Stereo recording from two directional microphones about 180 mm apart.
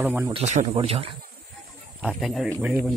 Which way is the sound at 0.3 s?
40° right (ahead or behind).